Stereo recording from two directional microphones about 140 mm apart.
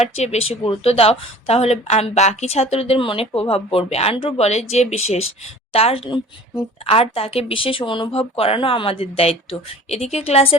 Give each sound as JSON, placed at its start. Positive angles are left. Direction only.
{"t": 0.0, "sound": "speech", "side_deg": 50}